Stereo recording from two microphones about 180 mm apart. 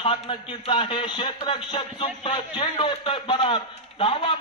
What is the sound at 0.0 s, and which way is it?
A man's voice, 30° left (ahead or behind).